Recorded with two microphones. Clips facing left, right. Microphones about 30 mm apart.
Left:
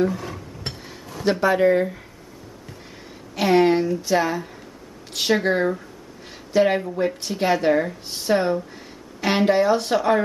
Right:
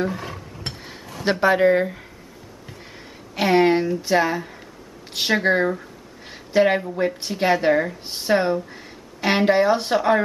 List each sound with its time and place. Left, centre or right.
0.0 s stir: centre
1.2 s a woman's voice: right
3.3 s a woman's voice: centre